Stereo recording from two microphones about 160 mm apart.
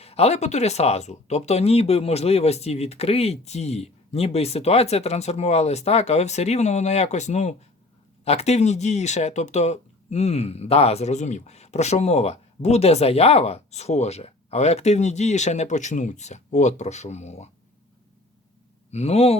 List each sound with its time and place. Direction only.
0.0 s speech: 40° left (ahead or behind)
18.9 s speech: 40° left (ahead or behind)